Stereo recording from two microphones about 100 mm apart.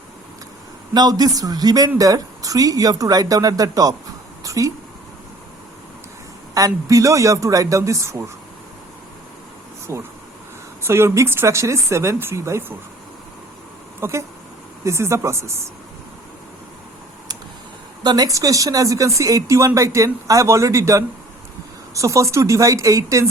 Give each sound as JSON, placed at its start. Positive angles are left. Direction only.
{"t": 0.9, "sound": "speech", "side_deg": -40}
{"t": 6.5, "sound": "speech", "side_deg": -35}
{"t": 9.9, "sound": "speech", "side_deg": -30}
{"t": 14.0, "sound": "speech", "side_deg": -30}
{"t": 18.0, "sound": "speech", "side_deg": -45}